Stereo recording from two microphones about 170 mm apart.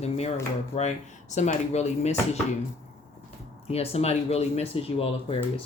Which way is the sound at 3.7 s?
35° left (ahead or behind).